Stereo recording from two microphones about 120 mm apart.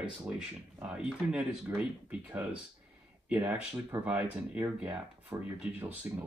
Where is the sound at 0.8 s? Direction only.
10° right (ahead or behind).